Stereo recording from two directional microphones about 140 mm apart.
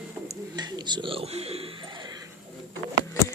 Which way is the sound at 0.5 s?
35° right (ahead or behind).